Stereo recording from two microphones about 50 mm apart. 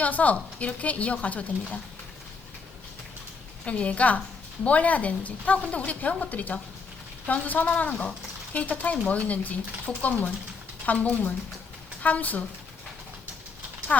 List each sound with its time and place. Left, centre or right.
0.0 s speech: left
3.7 s a woman's voice: left
13.9 s speech: left